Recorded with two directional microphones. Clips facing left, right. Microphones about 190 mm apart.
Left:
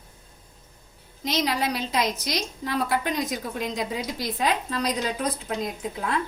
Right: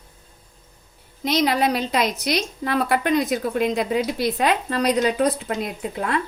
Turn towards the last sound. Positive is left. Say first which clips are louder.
# right 3 dB
turn(degrees=-65)  # may be behind; listen again after turning